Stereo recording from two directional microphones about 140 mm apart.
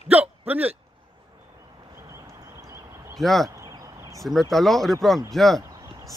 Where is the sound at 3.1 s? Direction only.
Centre (ahead or behind).